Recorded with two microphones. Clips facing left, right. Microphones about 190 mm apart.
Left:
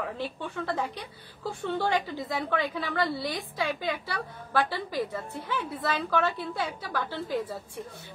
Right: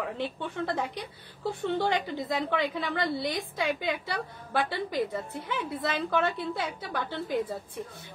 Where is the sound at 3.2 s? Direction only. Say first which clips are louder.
Right 1 dB; 55° right (ahead or behind).